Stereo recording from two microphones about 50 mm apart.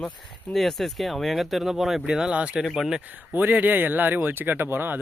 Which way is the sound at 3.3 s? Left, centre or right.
Right.